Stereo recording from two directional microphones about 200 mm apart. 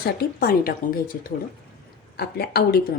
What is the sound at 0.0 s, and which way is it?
Speech, 50° left (ahead or behind).